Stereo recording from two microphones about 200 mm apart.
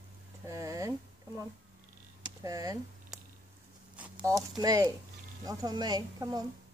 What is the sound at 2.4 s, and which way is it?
Speech, 15° right (ahead or behind).